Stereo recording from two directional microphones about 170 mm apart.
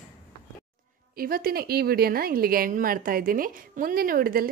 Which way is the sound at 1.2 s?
60° right (ahead or behind).